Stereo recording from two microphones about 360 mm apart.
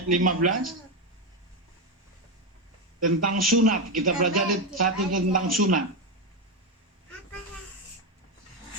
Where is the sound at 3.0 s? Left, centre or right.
Right.